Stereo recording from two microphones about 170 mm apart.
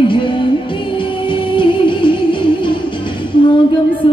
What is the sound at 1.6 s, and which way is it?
Music, 30° left (ahead or behind).